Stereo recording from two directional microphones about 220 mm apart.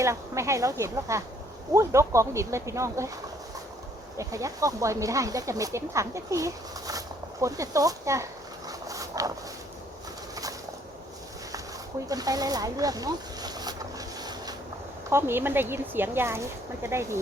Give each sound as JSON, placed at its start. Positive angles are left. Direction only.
{"t": 0.0, "sound": "speech", "side_deg": -15}
{"t": 4.2, "sound": "speech", "side_deg": -15}
{"t": 12.0, "sound": "speech", "side_deg": -15}
{"t": 14.2, "sound": "boat", "side_deg": -15}
{"t": 15.1, "sound": "speech", "side_deg": -10}